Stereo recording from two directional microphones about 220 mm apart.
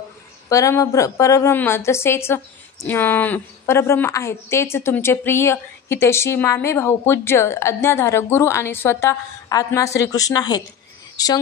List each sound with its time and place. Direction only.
0.5 s a woman's voice: 15° left (ahead or behind)